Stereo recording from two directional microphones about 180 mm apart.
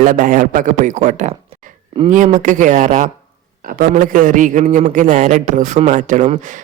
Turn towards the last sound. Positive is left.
turn(degrees=-45)  # may be behind; listen again after turning